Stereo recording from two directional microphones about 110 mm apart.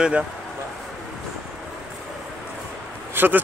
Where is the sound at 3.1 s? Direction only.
20° right (ahead or behind).